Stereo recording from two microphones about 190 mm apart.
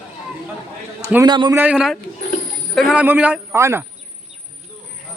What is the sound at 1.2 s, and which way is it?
Speech, 25° right (ahead or behind).